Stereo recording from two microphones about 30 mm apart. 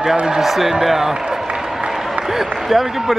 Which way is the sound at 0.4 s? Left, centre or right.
Centre.